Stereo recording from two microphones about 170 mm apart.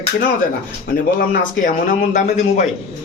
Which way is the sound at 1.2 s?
50° left (ahead or behind).